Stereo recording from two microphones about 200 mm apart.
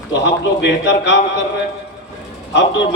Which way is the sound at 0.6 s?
60° left (ahead or behind).